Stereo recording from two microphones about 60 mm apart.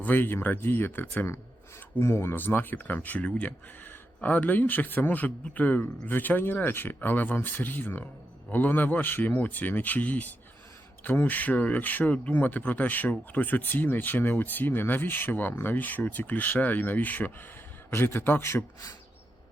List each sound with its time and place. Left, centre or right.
0.0 s speech: left
2.0 s speech: left
2.3 s speech: left
17.9 s speech: left